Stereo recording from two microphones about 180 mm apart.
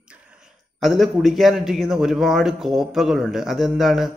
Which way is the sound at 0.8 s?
Centre (ahead or behind).